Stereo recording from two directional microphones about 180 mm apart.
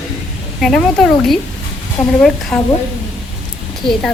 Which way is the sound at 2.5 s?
5° left (ahead or behind).